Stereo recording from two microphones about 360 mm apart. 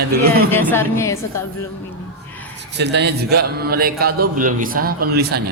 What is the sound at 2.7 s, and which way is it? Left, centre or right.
A man's voice, right.